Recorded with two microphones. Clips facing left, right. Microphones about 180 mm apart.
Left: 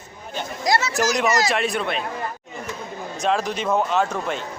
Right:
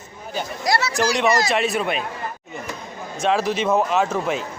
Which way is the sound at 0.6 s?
20° left (ahead or behind).